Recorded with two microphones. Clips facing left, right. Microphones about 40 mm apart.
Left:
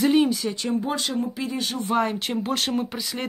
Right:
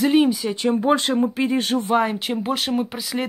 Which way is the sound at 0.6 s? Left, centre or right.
Right.